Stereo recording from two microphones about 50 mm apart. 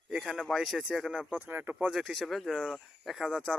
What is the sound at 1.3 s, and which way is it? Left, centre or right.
Speech, right.